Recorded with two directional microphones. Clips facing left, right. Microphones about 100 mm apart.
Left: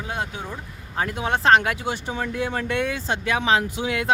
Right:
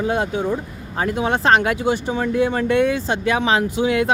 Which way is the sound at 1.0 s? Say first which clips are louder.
Right 4 dB; 25° right (ahead or behind).